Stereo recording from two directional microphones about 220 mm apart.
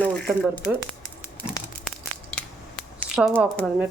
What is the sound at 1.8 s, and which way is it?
Tearing, 5° left (ahead or behind).